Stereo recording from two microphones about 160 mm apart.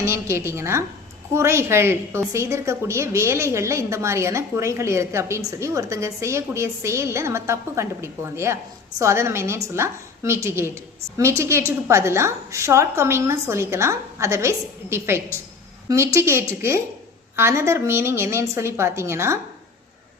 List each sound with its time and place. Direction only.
0.0 s a woman's voice: 15° right (ahead or behind)